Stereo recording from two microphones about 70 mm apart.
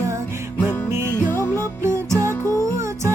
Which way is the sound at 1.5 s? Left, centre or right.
Right.